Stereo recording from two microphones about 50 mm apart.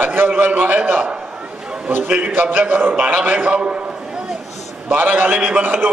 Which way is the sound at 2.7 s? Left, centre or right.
Right.